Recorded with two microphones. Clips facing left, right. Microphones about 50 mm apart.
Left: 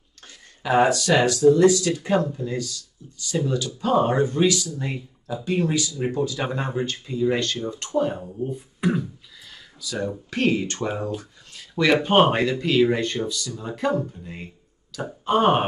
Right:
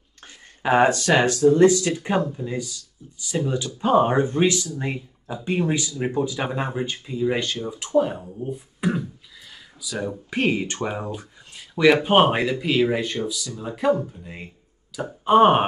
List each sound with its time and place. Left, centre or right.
0.6 s speech: right; by 15.6 s centre